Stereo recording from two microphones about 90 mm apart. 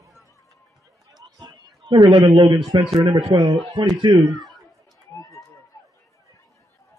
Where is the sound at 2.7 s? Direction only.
55° right (ahead or behind).